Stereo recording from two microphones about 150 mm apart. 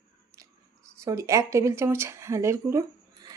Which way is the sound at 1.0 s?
20° right (ahead or behind).